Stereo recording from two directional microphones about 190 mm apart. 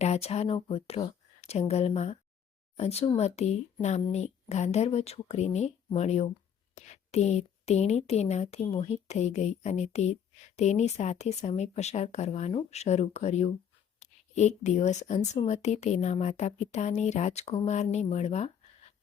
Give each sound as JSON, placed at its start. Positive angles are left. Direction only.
{"t": 0.0, "sound": "speech", "side_deg": 35}